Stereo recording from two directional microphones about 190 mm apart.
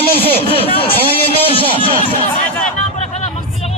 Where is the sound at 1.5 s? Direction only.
30° left (ahead or behind).